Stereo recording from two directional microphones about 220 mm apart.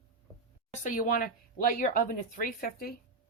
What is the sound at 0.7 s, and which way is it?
Speech, 35° left (ahead or behind).